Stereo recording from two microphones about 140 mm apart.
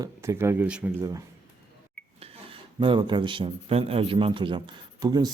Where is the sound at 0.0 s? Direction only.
20° right (ahead or behind).